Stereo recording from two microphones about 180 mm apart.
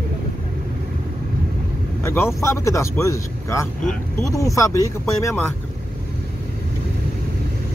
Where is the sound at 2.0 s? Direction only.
15° left (ahead or behind).